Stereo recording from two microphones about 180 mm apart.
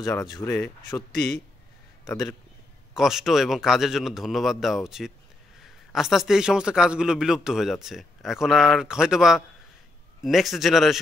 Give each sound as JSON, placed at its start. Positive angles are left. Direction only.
{"t": 0.0, "sound": "speech", "side_deg": 20}
{"t": 2.0, "sound": "a man's voice", "side_deg": 0}